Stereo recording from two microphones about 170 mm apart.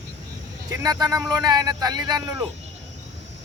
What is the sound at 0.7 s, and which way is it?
Speech, 20° right (ahead or behind).